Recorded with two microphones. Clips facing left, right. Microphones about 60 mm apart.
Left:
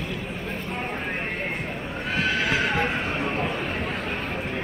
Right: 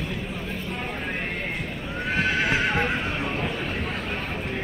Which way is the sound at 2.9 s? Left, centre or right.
Left.